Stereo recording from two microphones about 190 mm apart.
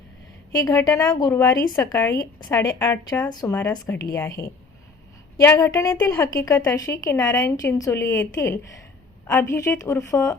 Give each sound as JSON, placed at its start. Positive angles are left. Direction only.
{"t": 0.5, "sound": "speech", "side_deg": 15}